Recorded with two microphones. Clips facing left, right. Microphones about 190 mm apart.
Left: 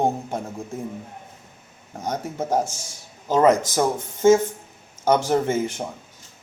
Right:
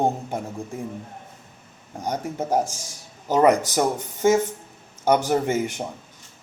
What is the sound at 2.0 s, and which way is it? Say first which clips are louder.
A man's voice: even; 10° right (ahead or behind).